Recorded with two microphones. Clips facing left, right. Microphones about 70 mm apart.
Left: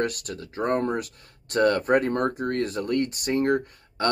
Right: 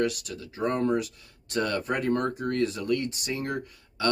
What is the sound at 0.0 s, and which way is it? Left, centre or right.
Speech, left.